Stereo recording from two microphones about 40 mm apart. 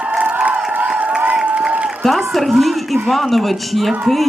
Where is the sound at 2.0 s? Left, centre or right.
Centre.